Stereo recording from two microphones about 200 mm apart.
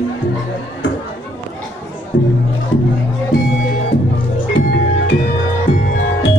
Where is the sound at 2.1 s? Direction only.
70° left (ahead or behind).